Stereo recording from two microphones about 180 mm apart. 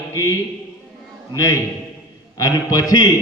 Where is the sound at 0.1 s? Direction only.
15° left (ahead or behind).